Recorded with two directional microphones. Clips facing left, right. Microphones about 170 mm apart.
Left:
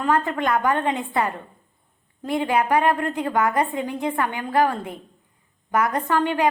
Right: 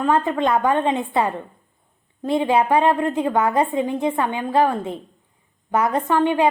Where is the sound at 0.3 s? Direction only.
20° right (ahead or behind).